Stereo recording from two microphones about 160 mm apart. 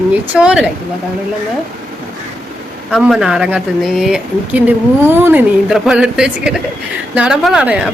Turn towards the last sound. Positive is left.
turn(degrees=-5)  # may be behind; listen again after turning